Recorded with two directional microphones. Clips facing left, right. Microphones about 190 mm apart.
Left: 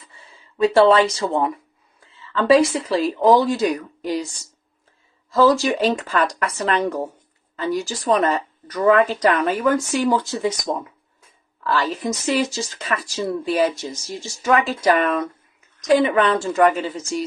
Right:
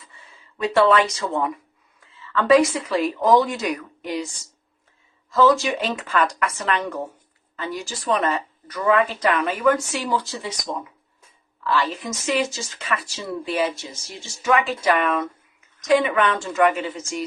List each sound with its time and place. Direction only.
0.0 s speech: 30° left (ahead or behind)
5.3 s speech: 35° left (ahead or behind)
11.6 s speech: 40° left (ahead or behind)